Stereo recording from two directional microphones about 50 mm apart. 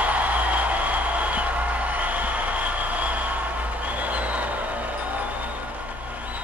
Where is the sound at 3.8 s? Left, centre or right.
Right.